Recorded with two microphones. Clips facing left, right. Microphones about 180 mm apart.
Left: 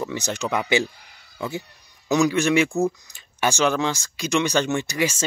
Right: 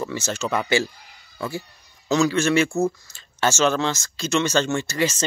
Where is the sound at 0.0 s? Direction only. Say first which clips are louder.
Even; 15° left (ahead or behind).